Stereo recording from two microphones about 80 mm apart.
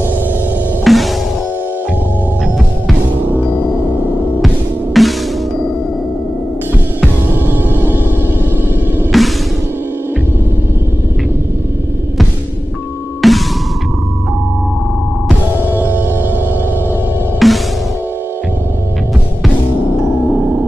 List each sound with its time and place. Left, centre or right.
0.8 s music: centre
3.3 s music: left
5.0 s music: centre
7.4 s music: right
9.1 s music: centre
13.2 s music: centre
15.7 s music: right
17.4 s music: centre